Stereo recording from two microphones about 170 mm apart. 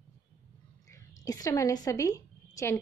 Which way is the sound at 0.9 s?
20° left (ahead or behind).